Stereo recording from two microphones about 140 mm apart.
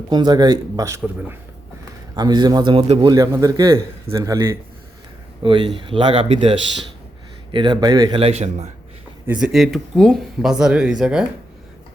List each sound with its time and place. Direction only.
0.1 s a man's voice: 30° right (ahead or behind)
2.1 s speech: 30° right (ahead or behind)
3.2 s a man's voice: 25° right (ahead or behind)
8.2 s a man's voice: 50° right (ahead or behind)
9.2 s speech: 5° right (ahead or behind)